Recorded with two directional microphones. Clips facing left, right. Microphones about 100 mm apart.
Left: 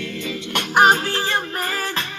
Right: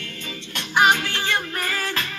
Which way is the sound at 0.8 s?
35° left (ahead or behind).